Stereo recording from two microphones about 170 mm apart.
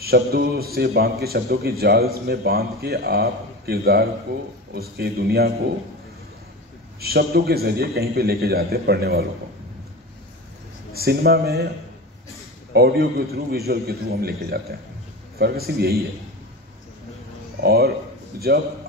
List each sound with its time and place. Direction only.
0.0 s a man's voice: 65° right (ahead or behind)
7.0 s a man's voice: 65° right (ahead or behind)
11.0 s a man's voice: 65° right (ahead or behind)
12.7 s a man's voice: 65° right (ahead or behind)
17.6 s speech: 70° right (ahead or behind)